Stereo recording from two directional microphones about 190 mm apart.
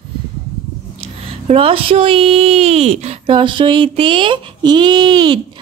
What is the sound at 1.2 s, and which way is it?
Speech, 30° right (ahead or behind).